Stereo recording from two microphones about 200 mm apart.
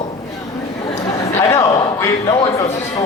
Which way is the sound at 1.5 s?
15° left (ahead or behind).